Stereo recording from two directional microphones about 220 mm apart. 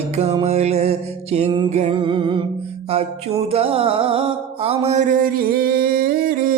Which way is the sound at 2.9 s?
30° right (ahead or behind).